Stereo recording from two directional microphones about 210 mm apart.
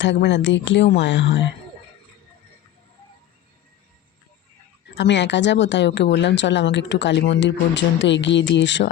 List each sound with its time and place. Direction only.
0.0 s a woman's voice: 60° left (ahead or behind)
4.9 s a woman's voice: 55° left (ahead or behind)